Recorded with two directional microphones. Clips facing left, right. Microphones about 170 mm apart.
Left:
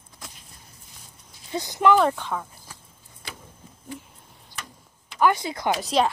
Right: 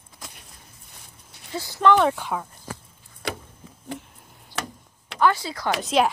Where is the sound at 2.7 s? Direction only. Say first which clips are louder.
Right 9 dB; 70° right (ahead or behind).